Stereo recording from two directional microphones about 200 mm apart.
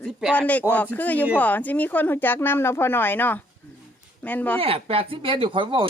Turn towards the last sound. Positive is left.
turn(degrees=-25)  # may be behind; listen again after turning